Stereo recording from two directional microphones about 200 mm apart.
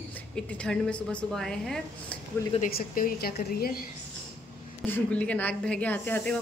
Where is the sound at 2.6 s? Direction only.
45° left (ahead or behind).